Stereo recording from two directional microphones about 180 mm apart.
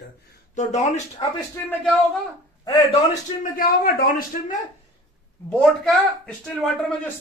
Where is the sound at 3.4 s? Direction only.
50° left (ahead or behind).